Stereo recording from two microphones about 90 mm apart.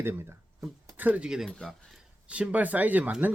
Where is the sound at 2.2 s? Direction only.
15° right (ahead or behind).